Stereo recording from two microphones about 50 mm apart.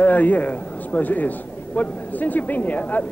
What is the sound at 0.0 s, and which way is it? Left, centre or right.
A man's voice, left.